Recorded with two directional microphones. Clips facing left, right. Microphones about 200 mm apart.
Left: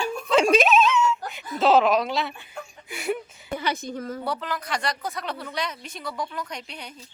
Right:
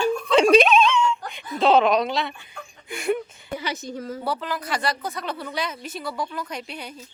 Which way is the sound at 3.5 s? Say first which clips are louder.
Left 2 dB; 55° left (ahead or behind).